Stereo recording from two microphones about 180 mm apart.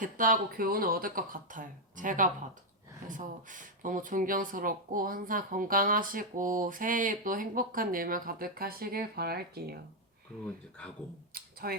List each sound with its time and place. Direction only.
0.0 s speech: 50° right (ahead or behind)
10.4 s speech: 5° left (ahead or behind)
11.3 s a sound: 55° right (ahead or behind)